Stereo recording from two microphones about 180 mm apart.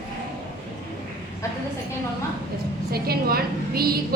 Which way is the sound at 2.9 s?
60° right (ahead or behind).